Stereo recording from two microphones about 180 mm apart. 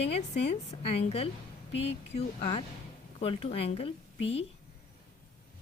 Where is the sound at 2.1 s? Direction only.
35° left (ahead or behind).